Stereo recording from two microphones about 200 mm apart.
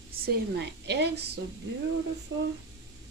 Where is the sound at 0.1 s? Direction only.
50° right (ahead or behind).